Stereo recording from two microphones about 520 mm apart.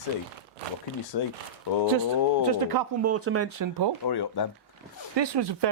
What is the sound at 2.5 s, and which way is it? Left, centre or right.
Speech, right.